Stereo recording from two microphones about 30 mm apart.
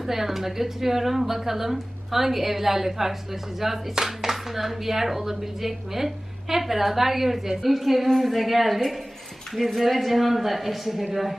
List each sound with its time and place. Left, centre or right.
0.0 s a woman's voice: centre